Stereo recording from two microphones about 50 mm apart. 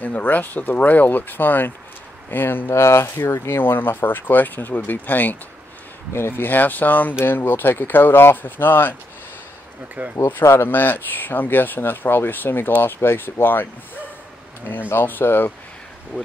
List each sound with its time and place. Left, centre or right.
0.0 s speech: left
2.7 s speech: left
3.4 s speech: left
6.1 s speech: left
10.0 s speech: right
10.4 s speech: left
14.9 s speech: left